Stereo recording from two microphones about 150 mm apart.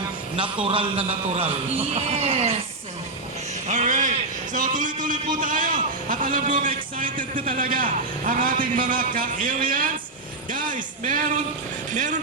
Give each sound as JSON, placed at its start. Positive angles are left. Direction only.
{"t": 0.3, "sound": "a man's voice", "side_deg": -35}
{"t": 2.0, "sound": "a sound", "side_deg": -45}
{"t": 3.7, "sound": "a man's voice", "side_deg": -55}